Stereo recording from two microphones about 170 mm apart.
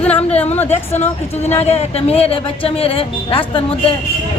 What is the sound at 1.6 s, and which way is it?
Speech, 40° left (ahead or behind).